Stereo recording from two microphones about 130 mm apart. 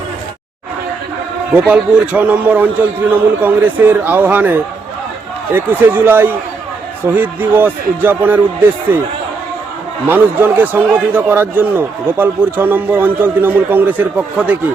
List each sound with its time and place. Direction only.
1.5 s a man's voice: 10° right (ahead or behind)
10.1 s a man's voice: 15° right (ahead or behind)